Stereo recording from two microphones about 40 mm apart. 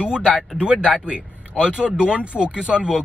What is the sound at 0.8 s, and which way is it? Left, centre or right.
Speech, right.